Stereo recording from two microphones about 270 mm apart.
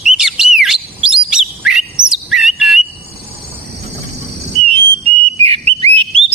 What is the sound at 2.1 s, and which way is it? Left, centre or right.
Bird, centre.